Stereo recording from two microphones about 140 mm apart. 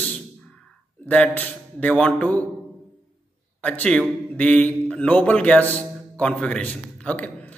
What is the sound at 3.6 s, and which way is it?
A man's voice, 10° left (ahead or behind).